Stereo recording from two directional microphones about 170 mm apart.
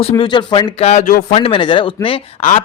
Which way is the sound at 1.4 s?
30° left (ahead or behind).